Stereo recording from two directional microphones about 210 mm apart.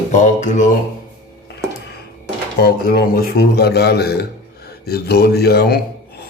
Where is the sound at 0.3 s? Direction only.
35° left (ahead or behind).